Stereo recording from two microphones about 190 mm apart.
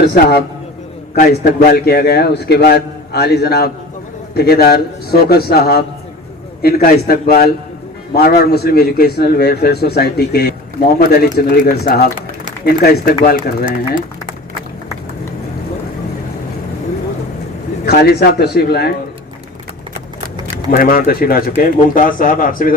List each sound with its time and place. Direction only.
0.1 s a man's voice: 60° left (ahead or behind)
13.3 s speech: 25° right (ahead or behind)
17.8 s a man's voice: 55° left (ahead or behind)
20.7 s speech: 50° left (ahead or behind)